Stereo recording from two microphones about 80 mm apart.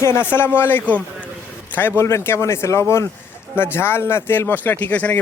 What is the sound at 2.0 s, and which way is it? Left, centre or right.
Speech, left.